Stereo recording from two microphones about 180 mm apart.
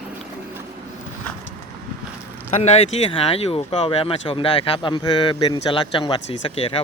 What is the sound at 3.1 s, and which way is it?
Speech, 30° left (ahead or behind).